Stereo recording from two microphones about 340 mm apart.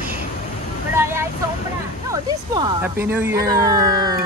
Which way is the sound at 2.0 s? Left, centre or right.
Centre.